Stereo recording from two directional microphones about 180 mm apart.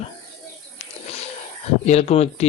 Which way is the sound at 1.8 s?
35° left (ahead or behind).